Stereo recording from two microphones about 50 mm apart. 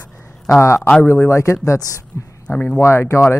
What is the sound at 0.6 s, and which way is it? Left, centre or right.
Speech, left.